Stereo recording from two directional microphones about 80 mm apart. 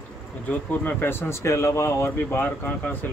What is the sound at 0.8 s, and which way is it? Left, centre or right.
Speech, left.